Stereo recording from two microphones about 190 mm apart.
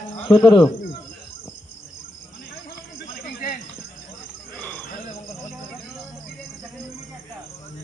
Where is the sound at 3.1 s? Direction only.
50° left (ahead or behind).